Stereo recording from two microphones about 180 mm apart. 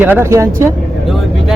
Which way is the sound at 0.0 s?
10° right (ahead or behind).